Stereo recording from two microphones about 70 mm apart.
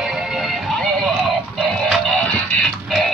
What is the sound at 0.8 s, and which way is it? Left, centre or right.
Music, centre.